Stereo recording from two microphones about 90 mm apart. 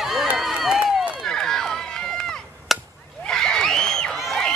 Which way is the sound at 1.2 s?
5° left (ahead or behind).